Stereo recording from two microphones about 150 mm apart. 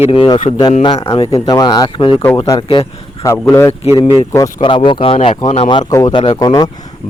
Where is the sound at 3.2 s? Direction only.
20° left (ahead or behind).